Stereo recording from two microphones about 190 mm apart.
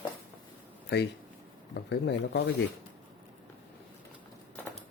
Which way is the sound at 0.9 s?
60° left (ahead or behind).